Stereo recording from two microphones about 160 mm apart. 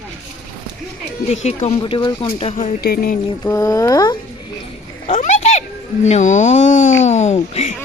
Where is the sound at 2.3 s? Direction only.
40° left (ahead or behind).